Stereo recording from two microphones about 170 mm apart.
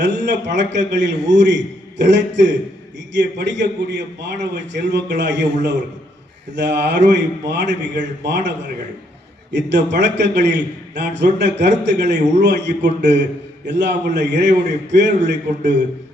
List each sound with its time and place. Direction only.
0.0 s a man's voice: 90° right